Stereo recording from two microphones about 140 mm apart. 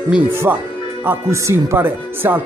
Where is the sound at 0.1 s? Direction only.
15° right (ahead or behind).